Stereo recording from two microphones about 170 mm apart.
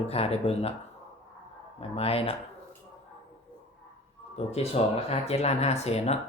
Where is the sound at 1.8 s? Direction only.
35° left (ahead or behind).